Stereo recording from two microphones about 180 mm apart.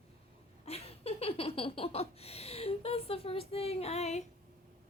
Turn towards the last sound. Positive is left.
turn(degrees=35)  # may be behind; listen again after turning